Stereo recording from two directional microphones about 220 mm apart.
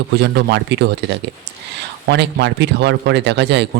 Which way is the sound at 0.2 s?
50° right (ahead or behind).